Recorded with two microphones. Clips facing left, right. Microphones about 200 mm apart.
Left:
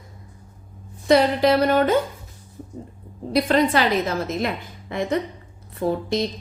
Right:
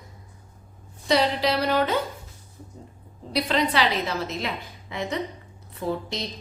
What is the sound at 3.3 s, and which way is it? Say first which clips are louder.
A woman's voice: left 5 dB; 50° left (ahead or behind).